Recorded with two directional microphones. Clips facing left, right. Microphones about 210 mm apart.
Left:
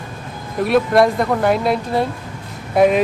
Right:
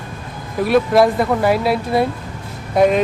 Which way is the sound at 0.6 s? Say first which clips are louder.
Right 1 dB; centre (ahead or behind).